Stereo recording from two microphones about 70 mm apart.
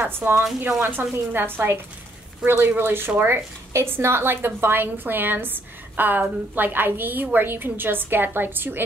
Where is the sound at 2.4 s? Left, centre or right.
Centre.